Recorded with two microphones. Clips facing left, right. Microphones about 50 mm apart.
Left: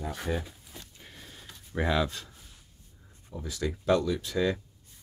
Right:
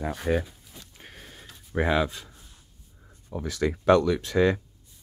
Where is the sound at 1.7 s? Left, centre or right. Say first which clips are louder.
Right 4 dB; right.